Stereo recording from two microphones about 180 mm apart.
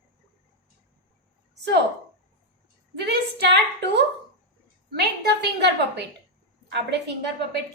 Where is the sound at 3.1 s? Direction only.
70° right (ahead or behind).